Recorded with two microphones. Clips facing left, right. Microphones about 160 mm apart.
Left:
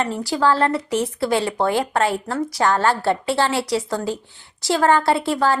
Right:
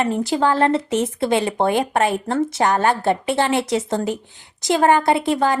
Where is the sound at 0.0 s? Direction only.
20° right (ahead or behind).